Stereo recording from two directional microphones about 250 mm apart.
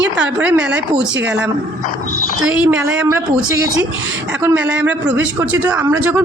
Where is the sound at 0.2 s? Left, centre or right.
Centre.